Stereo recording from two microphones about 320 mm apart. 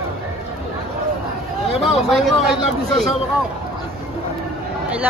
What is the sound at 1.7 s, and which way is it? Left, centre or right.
Speech, centre.